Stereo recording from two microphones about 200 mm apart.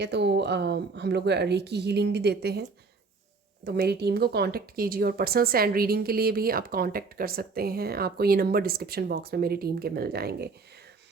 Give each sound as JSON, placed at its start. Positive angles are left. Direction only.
{"t": 0.0, "sound": "a woman's voice", "side_deg": -60}